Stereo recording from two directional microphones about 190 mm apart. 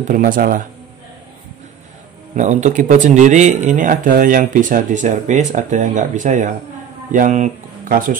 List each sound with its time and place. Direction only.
0.1 s speech: 45° right (ahead or behind)
2.3 s speech: 40° right (ahead or behind)